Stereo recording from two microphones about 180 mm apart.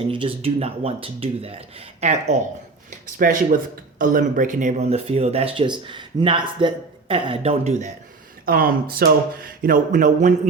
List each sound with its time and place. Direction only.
0.1 s speech: 30° right (ahead or behind)
8.4 s speech: 55° right (ahead or behind)